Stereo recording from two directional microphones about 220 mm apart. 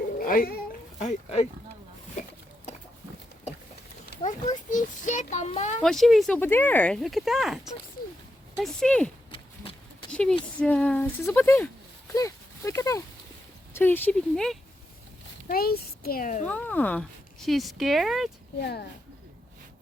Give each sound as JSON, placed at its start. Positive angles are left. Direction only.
{"t": 0.2, "sound": "speech", "side_deg": 40}
{"t": 4.2, "sound": "a child's voice", "side_deg": 35}
{"t": 5.8, "sound": "speech", "side_deg": 0}
{"t": 10.1, "sound": "a sound", "side_deg": 5}
{"t": 10.6, "sound": "speech", "side_deg": 5}
{"t": 15.4, "sound": "speech", "side_deg": 45}
{"t": 16.5, "sound": "speech", "side_deg": 5}
{"t": 18.6, "sound": "speech", "side_deg": 45}